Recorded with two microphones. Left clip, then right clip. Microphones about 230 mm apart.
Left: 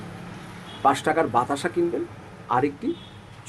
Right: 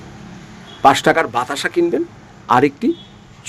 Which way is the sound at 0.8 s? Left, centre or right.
Right.